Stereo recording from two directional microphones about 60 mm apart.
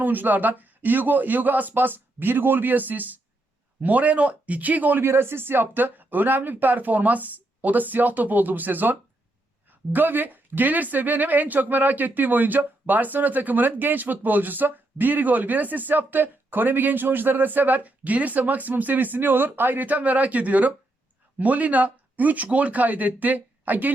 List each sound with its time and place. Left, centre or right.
0.0 s speech: right
5.0 s speech: right